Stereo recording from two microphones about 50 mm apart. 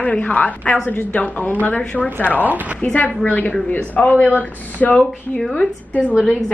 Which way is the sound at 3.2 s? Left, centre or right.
Left.